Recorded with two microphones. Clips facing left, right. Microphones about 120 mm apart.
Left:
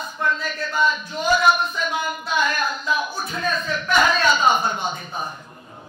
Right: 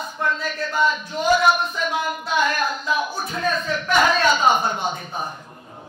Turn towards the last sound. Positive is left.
turn(degrees=-50)  # may be behind; listen again after turning